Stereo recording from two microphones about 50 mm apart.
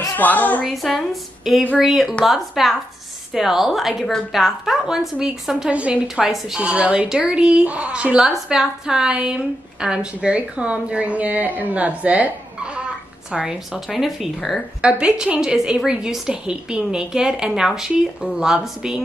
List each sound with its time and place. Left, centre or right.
0.2 s speech: left
0.7 s a woman's voice: centre
5.7 s a woman's voice: right
6.2 s a woman's voice: centre
6.6 s a woman's voice: right
7.6 s a woman's voice: right
8.2 s a woman's voice: centre; by 12.3 s right
13.3 s a woman's voice: centre
13.8 s a woman's voice: centre
14.8 s a woman's voice: right